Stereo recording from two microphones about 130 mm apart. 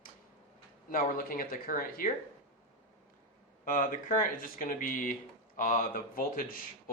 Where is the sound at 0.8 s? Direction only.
90° left.